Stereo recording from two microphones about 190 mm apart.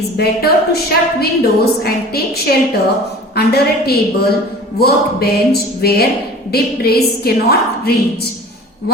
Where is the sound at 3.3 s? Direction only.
55° left (ahead or behind).